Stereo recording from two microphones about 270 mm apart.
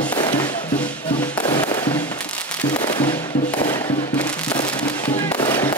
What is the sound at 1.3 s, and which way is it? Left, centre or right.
Fireworks, centre.